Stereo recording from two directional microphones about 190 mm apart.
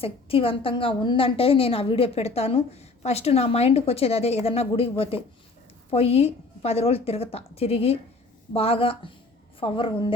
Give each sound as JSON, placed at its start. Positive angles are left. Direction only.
{"t": 0.0, "sound": "a woman's voice", "side_deg": 30}